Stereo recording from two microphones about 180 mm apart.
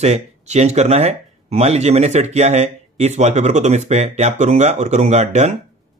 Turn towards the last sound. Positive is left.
turn(degrees=-40)  # may be behind; listen again after turning